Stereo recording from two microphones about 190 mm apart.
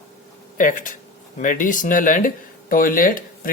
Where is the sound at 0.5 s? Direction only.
45° left (ahead or behind).